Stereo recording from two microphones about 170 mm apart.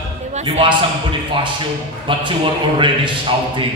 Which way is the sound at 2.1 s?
30° right (ahead or behind).